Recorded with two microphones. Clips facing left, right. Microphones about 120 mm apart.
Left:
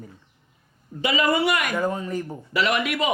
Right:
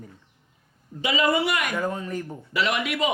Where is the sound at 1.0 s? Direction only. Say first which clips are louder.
Left 1 dB; 55° left (ahead or behind).